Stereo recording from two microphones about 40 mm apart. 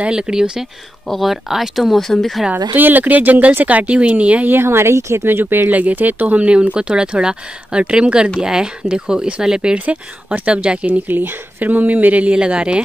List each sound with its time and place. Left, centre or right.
0.0 s speech: right
1.0 s speech: centre
1.3 s speech: centre
2.0 s speech: centre
2.5 s speech: right
4.5 s speech: right
5.7 s speech: right; by 9.6 s centre
9.8 s speech: right
10.5 s speech: right
10.9 s speech: right
12.4 s speech: right